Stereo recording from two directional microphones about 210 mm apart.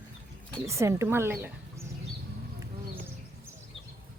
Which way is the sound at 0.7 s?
15° right (ahead or behind).